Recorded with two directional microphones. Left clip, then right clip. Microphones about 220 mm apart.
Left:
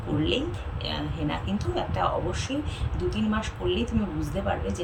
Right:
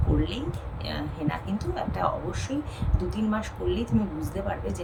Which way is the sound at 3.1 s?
5° right (ahead or behind).